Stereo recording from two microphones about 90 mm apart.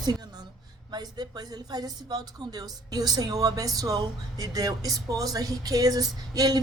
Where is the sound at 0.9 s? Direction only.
50° right (ahead or behind).